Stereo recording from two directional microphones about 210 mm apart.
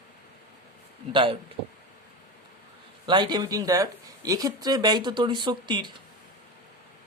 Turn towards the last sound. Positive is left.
turn(degrees=-20)  # may be behind; listen again after turning